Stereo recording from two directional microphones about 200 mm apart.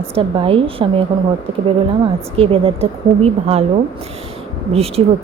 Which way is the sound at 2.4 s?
30° right (ahead or behind).